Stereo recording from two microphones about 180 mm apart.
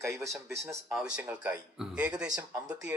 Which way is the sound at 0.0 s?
15° right (ahead or behind).